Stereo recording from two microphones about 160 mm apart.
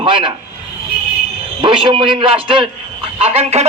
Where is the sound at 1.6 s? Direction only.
30° right (ahead or behind).